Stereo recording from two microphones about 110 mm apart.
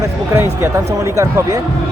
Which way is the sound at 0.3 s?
20° right (ahead or behind).